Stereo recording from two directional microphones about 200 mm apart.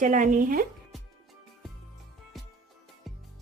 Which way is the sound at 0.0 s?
40° right (ahead or behind).